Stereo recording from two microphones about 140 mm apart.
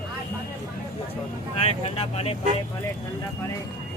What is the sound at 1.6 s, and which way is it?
Speech, 45° left (ahead or behind).